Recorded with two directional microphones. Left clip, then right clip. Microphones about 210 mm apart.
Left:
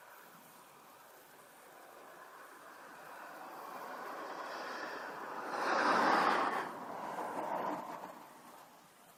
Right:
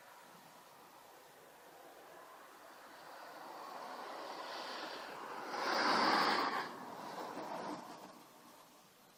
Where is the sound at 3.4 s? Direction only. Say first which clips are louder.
Left 1 dB; 35° right (ahead or behind); by 6.7 s 15° right (ahead or behind).